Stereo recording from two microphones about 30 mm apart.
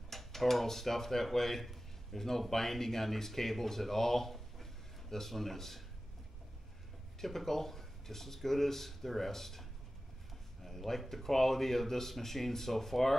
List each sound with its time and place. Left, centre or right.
0.1 s speech: centre
7.2 s speech: centre
10.9 s speech: centre